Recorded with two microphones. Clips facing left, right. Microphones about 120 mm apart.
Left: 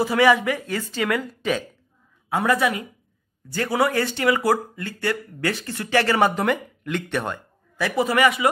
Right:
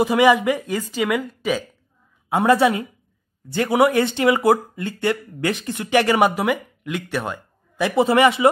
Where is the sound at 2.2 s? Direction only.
20° right (ahead or behind); by 7.4 s 5° right (ahead or behind).